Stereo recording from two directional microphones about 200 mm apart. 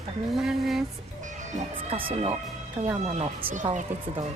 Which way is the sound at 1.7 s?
25° right (ahead or behind).